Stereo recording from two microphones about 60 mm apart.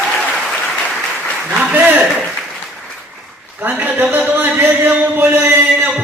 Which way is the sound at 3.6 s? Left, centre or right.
Right.